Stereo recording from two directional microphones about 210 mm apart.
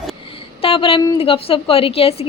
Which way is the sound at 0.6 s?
25° left (ahead or behind).